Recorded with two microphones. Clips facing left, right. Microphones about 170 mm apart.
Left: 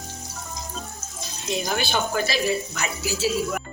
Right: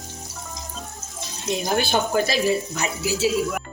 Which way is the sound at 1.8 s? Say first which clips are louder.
Right 3 dB; 45° right (ahead or behind).